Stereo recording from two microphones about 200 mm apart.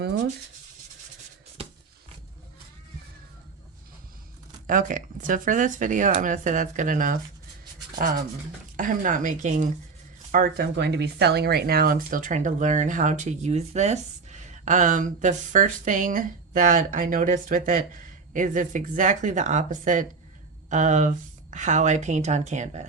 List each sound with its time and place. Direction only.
4.6 s speech: 40° right (ahead or behind)
10.3 s speech: 55° right (ahead or behind); by 22.9 s 35° right (ahead or behind)